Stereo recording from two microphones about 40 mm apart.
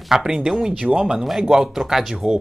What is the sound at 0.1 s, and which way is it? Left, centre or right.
Speech, centre.